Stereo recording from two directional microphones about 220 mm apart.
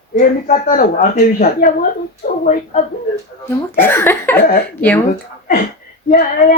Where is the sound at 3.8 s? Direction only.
10° left (ahead or behind).